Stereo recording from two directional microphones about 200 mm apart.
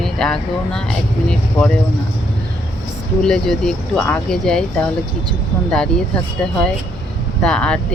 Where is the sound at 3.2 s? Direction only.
5° left (ahead or behind).